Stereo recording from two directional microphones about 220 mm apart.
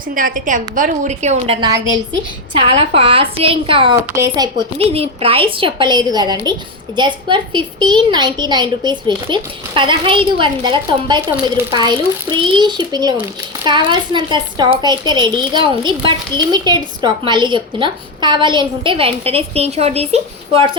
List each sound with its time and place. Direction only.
0.1 s a woman's voice: 40° right (ahead or behind)
1.6 s a woman's voice: 15° right (ahead or behind)